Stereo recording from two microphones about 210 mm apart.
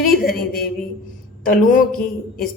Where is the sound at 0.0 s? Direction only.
45° left (ahead or behind).